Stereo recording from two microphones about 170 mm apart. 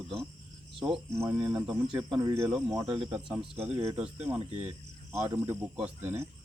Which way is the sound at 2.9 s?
30° right (ahead or behind).